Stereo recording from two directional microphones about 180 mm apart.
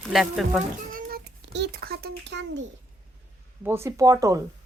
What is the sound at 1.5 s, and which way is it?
A child's voice, 70° right (ahead or behind).